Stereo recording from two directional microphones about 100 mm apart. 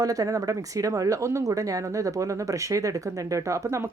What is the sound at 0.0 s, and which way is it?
Speech, 35° right (ahead or behind).